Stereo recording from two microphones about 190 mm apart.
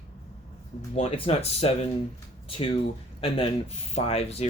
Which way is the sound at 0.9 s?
30° left (ahead or behind).